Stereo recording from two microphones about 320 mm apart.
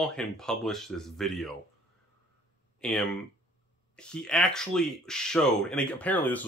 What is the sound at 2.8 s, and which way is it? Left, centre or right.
Speech, centre.